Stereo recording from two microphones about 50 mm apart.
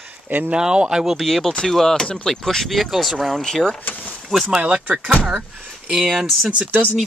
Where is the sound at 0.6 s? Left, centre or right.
Centre.